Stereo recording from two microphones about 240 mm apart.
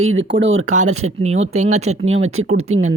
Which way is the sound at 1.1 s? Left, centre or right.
Right.